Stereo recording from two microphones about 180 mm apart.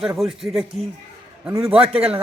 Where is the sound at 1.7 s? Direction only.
30° right (ahead or behind).